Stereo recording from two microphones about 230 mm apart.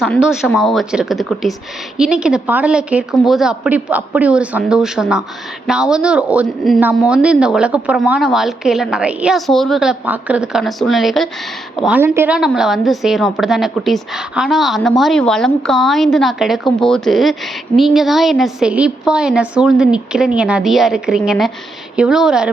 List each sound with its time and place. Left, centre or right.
0.0 s a woman's voice: centre